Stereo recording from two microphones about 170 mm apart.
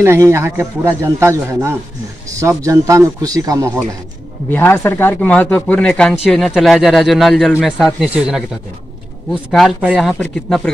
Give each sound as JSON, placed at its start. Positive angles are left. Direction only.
{"t": 0.0, "sound": "a man's voice", "side_deg": -15}
{"t": 4.5, "sound": "speech", "side_deg": 10}
{"t": 9.5, "sound": "speech", "side_deg": 0}